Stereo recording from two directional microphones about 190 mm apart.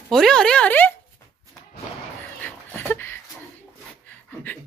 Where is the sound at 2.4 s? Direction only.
10° left (ahead or behind).